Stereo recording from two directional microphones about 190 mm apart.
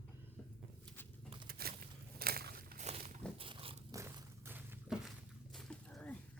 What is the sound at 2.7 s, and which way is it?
Walk, 35° right (ahead or behind).